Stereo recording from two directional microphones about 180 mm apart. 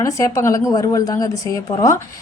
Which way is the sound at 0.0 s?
15° left (ahead or behind).